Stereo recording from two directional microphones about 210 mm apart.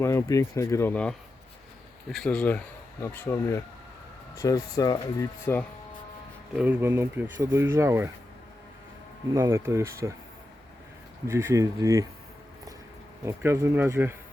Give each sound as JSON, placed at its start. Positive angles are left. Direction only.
{"t": 0.0, "sound": "speech", "side_deg": 15}
{"t": 2.1, "sound": "speech", "side_deg": 5}
{"t": 6.6, "sound": "speech", "side_deg": -10}
{"t": 9.3, "sound": "speech", "side_deg": -15}
{"t": 11.3, "sound": "speech", "side_deg": -10}
{"t": 13.2, "sound": "speech", "side_deg": -15}